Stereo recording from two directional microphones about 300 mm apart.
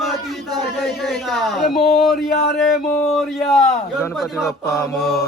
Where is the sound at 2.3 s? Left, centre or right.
Left.